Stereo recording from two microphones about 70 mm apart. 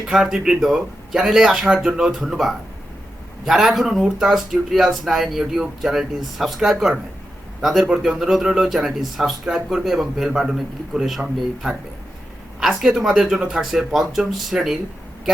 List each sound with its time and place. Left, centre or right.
0.1 s speech: centre